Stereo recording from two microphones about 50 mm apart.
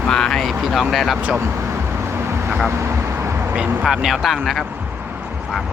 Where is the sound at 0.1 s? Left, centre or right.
Centre.